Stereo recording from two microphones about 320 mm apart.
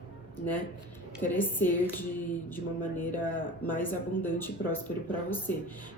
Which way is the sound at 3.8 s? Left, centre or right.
Centre.